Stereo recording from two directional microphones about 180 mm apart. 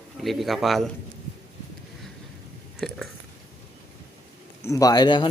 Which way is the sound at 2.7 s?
Centre (ahead or behind).